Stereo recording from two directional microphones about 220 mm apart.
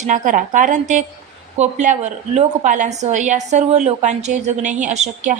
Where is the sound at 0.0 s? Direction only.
35° right (ahead or behind).